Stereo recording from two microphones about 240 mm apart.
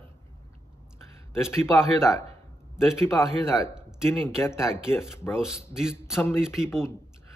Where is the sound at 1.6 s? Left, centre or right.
Centre.